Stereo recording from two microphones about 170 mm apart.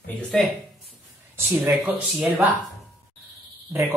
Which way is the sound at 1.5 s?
10° right (ahead or behind).